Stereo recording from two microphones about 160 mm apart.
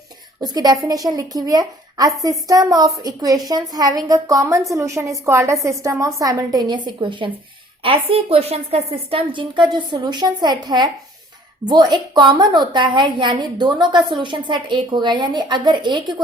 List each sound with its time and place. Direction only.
0.4 s a woman's voice: 25° right (ahead or behind)